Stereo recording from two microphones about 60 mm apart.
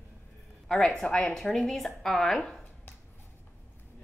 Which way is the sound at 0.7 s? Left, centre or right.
Centre.